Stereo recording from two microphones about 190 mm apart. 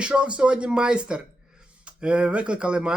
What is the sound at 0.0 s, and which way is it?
Speech, 5° right (ahead or behind).